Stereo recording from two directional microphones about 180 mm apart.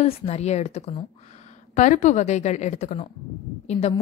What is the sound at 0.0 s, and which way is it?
A woman's voice, 35° left (ahead or behind).